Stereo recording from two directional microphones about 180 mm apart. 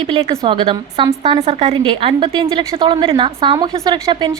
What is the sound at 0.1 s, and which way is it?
A woman's voice, 30° right (ahead or behind).